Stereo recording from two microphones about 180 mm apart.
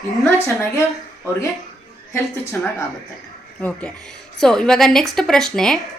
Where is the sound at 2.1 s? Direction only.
15° left (ahead or behind).